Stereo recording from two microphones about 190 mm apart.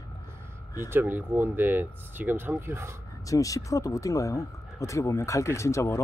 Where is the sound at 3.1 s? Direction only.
15° left (ahead or behind).